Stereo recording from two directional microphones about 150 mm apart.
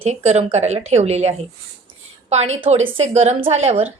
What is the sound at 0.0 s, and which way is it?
A woman's voice, 45° right (ahead or behind).